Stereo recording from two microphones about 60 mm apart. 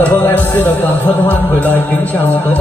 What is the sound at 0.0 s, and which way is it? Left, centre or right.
Speech, left.